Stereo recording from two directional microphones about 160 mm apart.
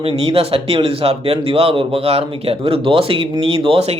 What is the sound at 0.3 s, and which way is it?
Speech, 35° right (ahead or behind).